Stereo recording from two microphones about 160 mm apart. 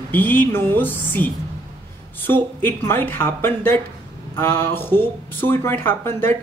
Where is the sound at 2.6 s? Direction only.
15° left (ahead or behind).